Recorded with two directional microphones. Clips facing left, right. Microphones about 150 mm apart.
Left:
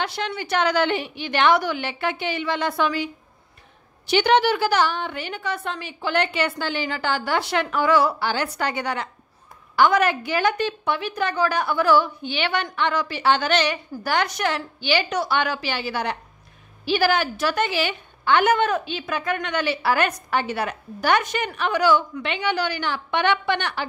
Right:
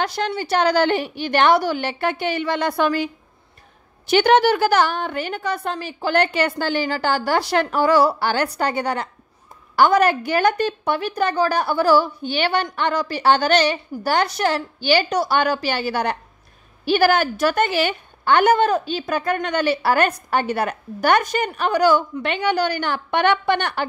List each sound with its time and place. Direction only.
0.0 s a woman's voice: 40° right (ahead or behind)
4.1 s a woman's voice: 50° right (ahead or behind)